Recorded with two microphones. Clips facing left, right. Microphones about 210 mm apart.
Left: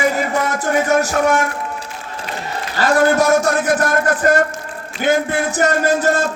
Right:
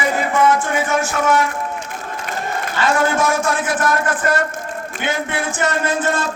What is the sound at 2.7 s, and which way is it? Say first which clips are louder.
A man's voice: left 4 dB; 40° left (ahead or behind).